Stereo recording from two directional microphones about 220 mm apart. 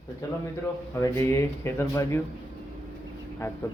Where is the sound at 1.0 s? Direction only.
15° left (ahead or behind).